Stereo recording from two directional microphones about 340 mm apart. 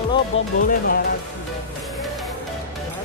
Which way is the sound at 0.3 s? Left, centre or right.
Left.